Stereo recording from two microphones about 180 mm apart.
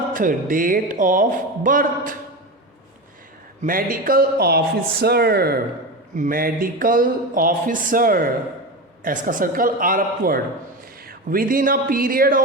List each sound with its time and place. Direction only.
0.1 s speech: 50° right (ahead or behind)
3.6 s a man's voice: 50° right (ahead or behind)